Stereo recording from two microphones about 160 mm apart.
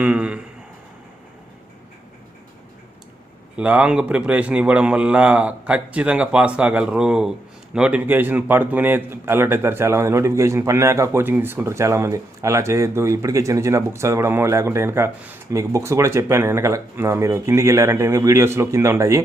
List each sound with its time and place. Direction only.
0.0 s a man's voice: 5° right (ahead or behind)
3.5 s a man's voice: 10° right (ahead or behind)